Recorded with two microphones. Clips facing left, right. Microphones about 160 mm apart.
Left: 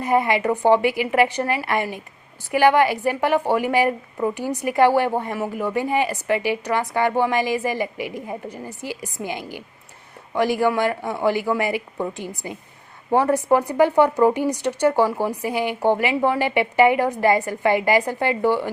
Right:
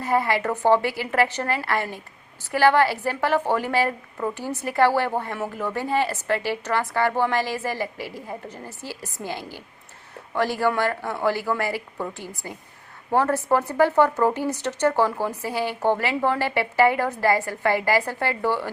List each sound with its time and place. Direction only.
0.0 s a woman's voice: 20° left (ahead or behind)